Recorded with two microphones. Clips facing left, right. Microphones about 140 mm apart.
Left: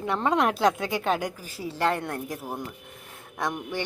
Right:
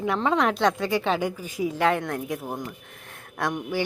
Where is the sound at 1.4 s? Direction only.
35° left (ahead or behind).